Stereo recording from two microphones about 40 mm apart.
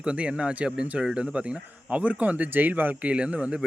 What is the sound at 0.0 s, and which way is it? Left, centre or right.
A man's voice, right.